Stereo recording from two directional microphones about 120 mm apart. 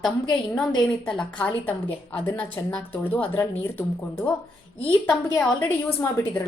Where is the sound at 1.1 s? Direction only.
10° left (ahead or behind).